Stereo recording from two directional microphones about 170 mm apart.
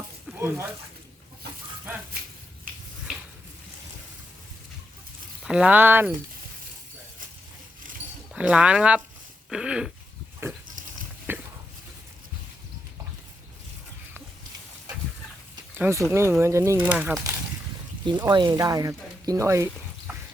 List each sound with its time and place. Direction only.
0.3 s speech: 15° right (ahead or behind)
5.5 s speech: 5° right (ahead or behind)
8.3 s speech: 5° right (ahead or behind)
9.5 s a sound: 5° right (ahead or behind)
10.4 s pig: 15° right (ahead or behind)
11.3 s a sound: 10° right (ahead or behind)
15.8 s speech: 15° right (ahead or behind)
18.0 s speech: 25° right (ahead or behind)